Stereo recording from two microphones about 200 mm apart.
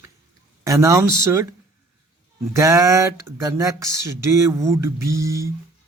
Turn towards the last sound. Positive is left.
turn(degrees=-15)  # may be behind; listen again after turning